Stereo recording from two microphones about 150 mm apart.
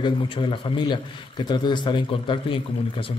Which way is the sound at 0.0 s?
35° left (ahead or behind).